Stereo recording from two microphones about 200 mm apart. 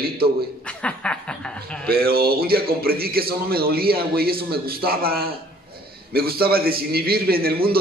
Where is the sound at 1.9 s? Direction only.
50° right (ahead or behind).